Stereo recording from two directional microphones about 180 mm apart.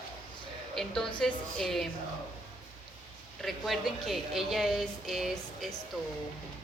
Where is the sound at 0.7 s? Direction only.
Centre (ahead or behind).